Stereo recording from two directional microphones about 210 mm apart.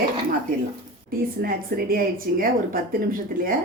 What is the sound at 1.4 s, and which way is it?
A woman's voice, 45° right (ahead or behind).